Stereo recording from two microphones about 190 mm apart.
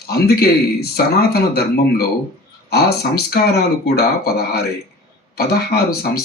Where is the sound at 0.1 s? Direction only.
55° left (ahead or behind).